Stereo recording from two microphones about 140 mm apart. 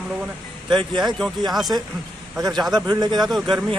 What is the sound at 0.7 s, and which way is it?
Speech, 30° right (ahead or behind).